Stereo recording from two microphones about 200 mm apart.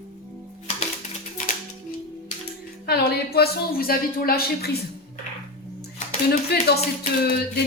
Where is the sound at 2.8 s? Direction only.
50° left (ahead or behind).